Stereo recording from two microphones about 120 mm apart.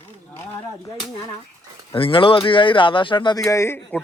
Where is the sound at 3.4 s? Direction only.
25° left (ahead or behind).